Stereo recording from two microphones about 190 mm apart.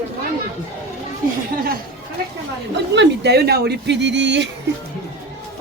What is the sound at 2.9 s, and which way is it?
Speech, 65° right (ahead or behind).